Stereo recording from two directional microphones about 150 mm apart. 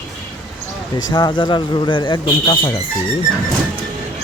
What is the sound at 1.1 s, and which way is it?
Speech, 30° left (ahead or behind).